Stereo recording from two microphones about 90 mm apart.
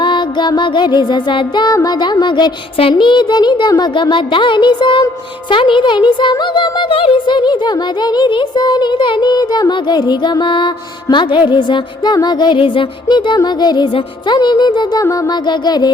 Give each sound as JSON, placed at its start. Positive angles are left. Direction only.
{"t": 0.0, "sound": "speech", "side_deg": 60}
{"t": 2.9, "sound": "speech", "side_deg": 60}
{"t": 15.1, "sound": "a sound", "side_deg": 45}